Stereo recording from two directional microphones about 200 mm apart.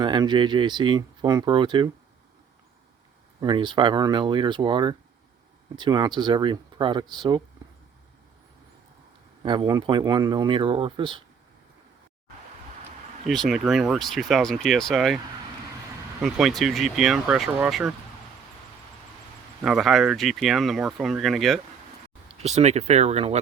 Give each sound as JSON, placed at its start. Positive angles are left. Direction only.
{"t": 0.0, "sound": "speech", "side_deg": -20}
{"t": 3.4, "sound": "speech", "side_deg": -20}
{"t": 9.4, "sound": "speech", "side_deg": -25}
{"t": 13.2, "sound": "speech", "side_deg": 0}
{"t": 16.2, "sound": "speech", "side_deg": 0}
{"t": 19.6, "sound": "speech", "side_deg": 0}
{"t": 22.4, "sound": "speech", "side_deg": -35}